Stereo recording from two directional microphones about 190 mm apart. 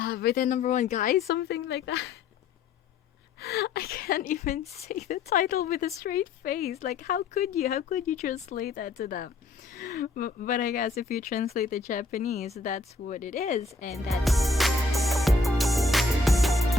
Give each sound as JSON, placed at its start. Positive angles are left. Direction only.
{"t": 0.0, "sound": "a woman's voice", "side_deg": 55}
{"t": 3.4, "sound": "a woman's voice", "side_deg": 60}
{"t": 13.9, "sound": "music", "side_deg": 0}